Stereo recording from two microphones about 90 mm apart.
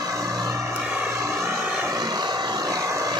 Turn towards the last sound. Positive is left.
turn(degrees=-40)  # may be behind; listen again after turning